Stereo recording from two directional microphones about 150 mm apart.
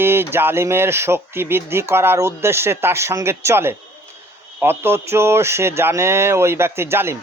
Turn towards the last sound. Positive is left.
turn(degrees=-15)  # may be behind; listen again after turning